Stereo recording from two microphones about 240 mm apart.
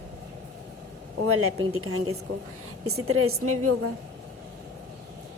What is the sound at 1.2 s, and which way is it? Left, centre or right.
A woman's voice, right.